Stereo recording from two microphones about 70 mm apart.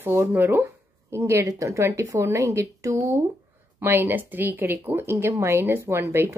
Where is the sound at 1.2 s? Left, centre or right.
Right.